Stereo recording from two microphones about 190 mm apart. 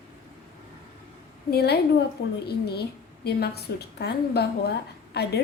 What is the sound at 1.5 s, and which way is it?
A woman's voice, 60° left (ahead or behind).